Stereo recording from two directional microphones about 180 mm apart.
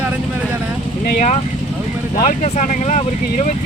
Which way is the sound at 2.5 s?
45° left (ahead or behind).